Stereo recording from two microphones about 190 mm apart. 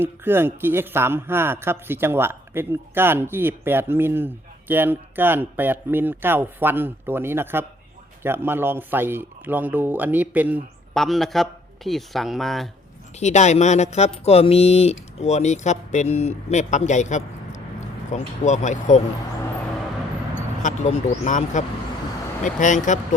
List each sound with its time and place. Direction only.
0.0 s speech: 10° right (ahead or behind)
13.1 s speech: 35° left (ahead or behind)
20.6 s speech: 40° left (ahead or behind)